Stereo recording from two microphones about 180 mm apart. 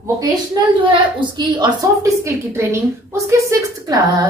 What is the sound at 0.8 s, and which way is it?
A woman's voice, 25° right (ahead or behind).